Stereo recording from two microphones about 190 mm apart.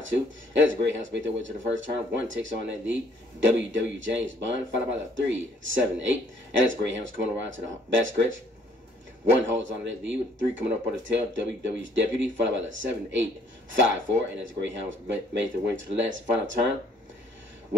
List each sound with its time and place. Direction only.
0.0 s speech: 75° right (ahead or behind)
9.5 s speech: 75° right (ahead or behind)